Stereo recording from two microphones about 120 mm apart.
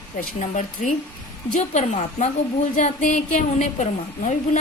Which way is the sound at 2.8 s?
90° left.